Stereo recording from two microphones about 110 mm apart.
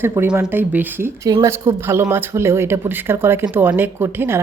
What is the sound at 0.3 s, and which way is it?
Speech, 15° right (ahead or behind).